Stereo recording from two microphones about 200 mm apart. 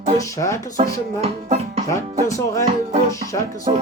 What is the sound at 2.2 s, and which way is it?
Speech, 15° left (ahead or behind).